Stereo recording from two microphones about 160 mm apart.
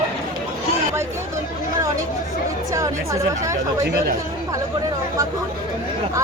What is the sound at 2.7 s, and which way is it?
Chatter, 20° right (ahead or behind).